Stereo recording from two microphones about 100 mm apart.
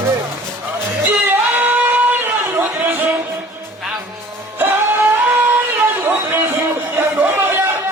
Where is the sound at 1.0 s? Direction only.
20° right (ahead or behind).